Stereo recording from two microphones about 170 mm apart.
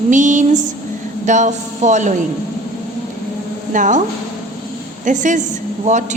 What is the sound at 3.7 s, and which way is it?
Speech, 45° right (ahead or behind).